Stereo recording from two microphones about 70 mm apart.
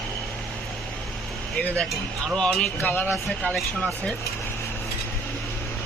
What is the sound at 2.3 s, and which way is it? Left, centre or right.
Speech, centre.